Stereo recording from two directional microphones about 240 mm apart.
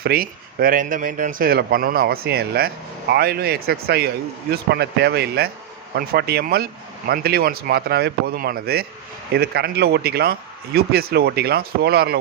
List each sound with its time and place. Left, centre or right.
0.0 s speech: right